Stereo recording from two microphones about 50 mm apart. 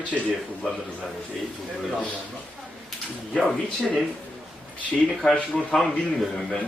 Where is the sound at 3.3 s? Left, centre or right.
Centre.